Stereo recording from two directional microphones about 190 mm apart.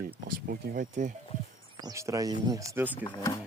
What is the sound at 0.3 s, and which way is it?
Speech, 50° right (ahead or behind).